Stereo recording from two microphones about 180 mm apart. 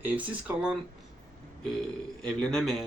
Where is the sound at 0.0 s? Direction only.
5° right (ahead or behind).